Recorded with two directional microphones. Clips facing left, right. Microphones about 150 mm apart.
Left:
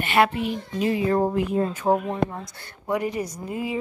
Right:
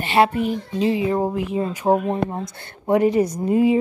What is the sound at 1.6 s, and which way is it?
Speech, 15° right (ahead or behind).